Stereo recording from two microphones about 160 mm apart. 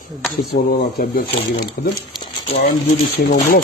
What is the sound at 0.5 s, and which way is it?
Speech, 60° left (ahead or behind).